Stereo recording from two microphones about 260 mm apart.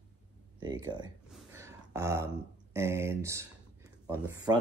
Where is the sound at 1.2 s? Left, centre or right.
Centre.